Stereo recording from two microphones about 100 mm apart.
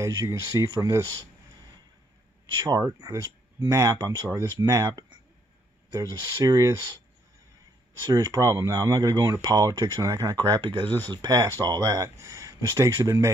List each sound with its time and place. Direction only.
0.0 s speech: 35° right (ahead or behind)
2.6 s speech: 35° right (ahead or behind)
8.0 s speech: 35° right (ahead or behind)